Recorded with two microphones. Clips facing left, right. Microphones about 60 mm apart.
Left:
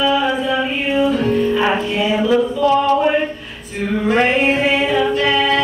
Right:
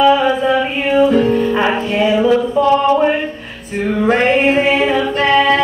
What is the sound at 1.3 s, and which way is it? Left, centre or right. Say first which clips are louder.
Music: right 2 dB; right.